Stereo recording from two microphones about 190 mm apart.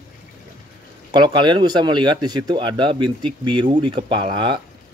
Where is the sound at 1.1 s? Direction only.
25° right (ahead or behind).